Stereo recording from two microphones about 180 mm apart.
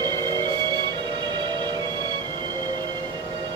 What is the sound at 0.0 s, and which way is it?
Music, 25° right (ahead or behind).